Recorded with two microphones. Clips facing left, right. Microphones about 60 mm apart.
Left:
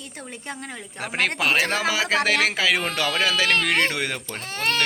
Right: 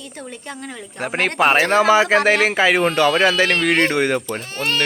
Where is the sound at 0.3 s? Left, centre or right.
Left.